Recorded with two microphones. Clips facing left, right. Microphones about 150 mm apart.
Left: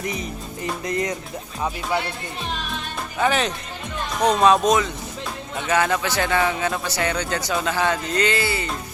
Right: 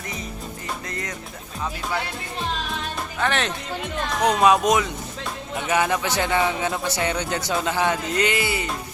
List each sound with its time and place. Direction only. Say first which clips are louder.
0.9 s music: left 8 dB; 20° left (ahead or behind)
3.2 s speech: left 4 dB; 5° left (ahead or behind)
4.3 s speech: left 1 dB; 10° right (ahead or behind)